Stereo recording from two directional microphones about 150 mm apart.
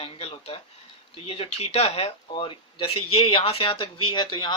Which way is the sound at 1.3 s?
45° left (ahead or behind).